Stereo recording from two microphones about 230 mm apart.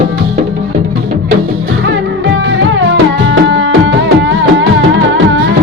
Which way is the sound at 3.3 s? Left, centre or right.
Right.